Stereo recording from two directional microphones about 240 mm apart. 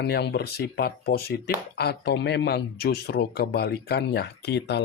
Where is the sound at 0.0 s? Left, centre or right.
Left.